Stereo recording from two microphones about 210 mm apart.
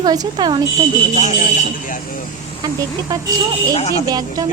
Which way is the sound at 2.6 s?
20° right (ahead or behind).